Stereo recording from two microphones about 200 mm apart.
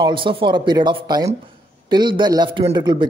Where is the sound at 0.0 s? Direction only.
25° right (ahead or behind).